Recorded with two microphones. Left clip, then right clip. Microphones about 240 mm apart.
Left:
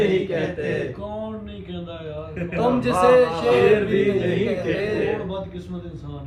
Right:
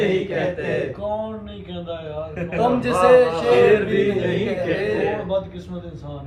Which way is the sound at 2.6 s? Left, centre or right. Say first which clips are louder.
Right 1 dB; left.